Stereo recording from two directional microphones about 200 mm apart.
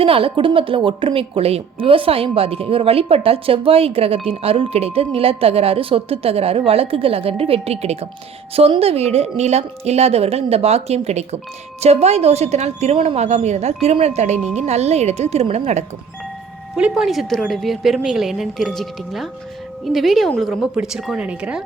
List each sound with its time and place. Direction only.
0.0 s a woman's voice: 25° right (ahead or behind)
16.7 s speech: 5° right (ahead or behind)